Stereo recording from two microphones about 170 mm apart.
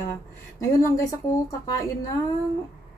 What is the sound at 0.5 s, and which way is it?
A woman's voice, 20° left (ahead or behind).